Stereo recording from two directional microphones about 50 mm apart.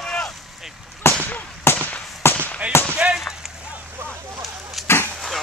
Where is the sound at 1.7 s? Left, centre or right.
Left.